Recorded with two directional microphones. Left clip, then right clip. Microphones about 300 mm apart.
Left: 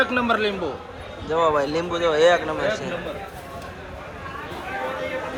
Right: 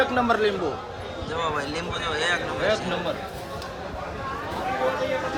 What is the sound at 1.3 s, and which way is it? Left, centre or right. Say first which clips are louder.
A man's voice: left 8 dB; centre.